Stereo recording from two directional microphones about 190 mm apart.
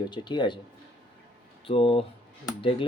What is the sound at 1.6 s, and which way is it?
Speech, 30° left (ahead or behind).